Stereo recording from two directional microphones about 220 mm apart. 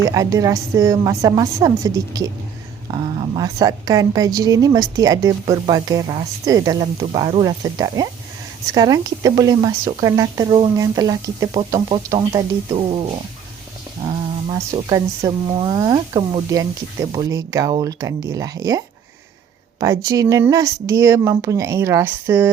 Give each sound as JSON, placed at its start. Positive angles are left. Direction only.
{"t": 0.0, "sound": "a woman's voice", "side_deg": -15}
{"t": 19.8, "sound": "a woman's voice", "side_deg": -15}